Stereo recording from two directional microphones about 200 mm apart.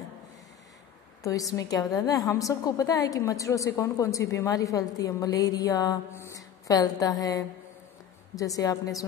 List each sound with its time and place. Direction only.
1.2 s a woman's voice: 15° left (ahead or behind)